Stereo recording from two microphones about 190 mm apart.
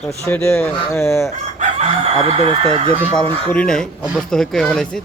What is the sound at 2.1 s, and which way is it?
Speech, 35° right (ahead or behind).